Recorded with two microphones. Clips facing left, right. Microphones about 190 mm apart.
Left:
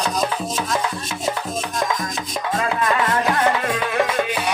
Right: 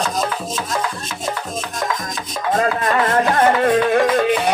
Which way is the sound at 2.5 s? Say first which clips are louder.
Right 3 dB; 45° right (ahead or behind).